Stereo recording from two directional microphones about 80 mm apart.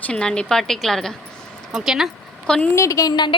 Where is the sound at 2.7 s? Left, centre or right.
Left.